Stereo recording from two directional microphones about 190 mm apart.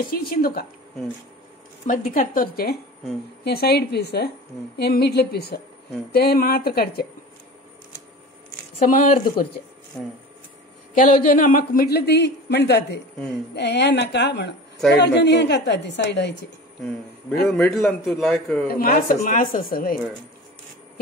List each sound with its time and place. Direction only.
0.1 s speech: 50° left (ahead or behind)
1.9 s a man's voice: 45° left (ahead or behind)
8.9 s speech: 45° left (ahead or behind)
11.0 s a man's voice: 45° left (ahead or behind); by 16.3 s 65° left (ahead or behind)
17.5 s a man's voice: 5° left (ahead or behind)
18.7 s speech: 50° left (ahead or behind)